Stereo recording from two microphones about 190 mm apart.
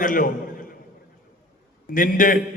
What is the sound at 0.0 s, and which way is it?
Speech, 45° left (ahead or behind).